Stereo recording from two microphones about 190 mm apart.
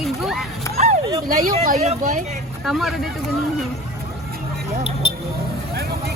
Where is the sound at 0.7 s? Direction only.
35° right (ahead or behind).